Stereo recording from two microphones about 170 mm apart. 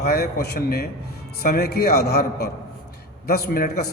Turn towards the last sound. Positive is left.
turn(degrees=65)  # may be behind; listen again after turning